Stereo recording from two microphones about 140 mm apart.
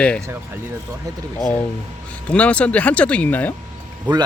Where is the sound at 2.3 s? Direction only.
10° left (ahead or behind).